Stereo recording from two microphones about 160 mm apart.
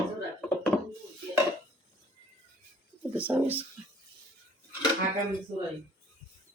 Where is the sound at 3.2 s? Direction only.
10° right (ahead or behind).